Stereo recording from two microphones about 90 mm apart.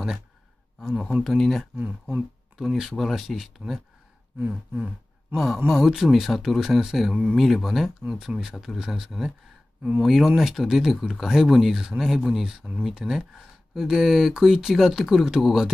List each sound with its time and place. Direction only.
1.2 s speech: centre (ahead or behind)
1.8 s speech: 20° right (ahead or behind)
2.5 s speech: 5° right (ahead or behind)
4.4 s a sound: 15° right (ahead or behind)
5.3 s speech: centre (ahead or behind)